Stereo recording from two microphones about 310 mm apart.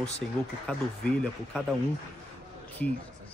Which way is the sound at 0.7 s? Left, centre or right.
Centre.